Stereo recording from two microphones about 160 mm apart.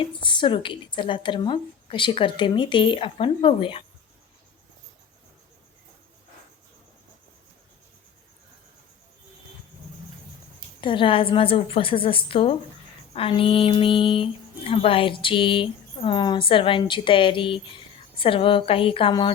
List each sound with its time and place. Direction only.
0.0 s speech: 30° left (ahead or behind)
10.8 s speech: 30° left (ahead or behind)